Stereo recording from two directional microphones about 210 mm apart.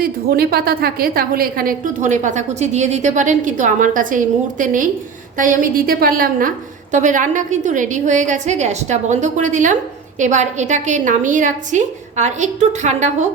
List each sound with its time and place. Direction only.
0.0 s a woman's voice: 45° right (ahead or behind)